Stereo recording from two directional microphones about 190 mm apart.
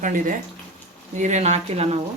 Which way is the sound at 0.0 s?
45° right (ahead or behind).